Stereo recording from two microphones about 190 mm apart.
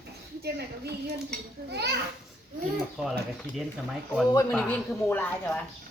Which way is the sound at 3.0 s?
Centre (ahead or behind).